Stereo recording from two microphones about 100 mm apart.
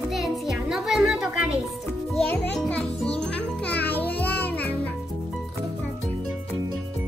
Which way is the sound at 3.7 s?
15° left (ahead or behind).